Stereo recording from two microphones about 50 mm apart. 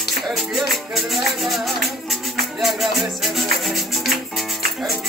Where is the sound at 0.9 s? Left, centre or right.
Centre.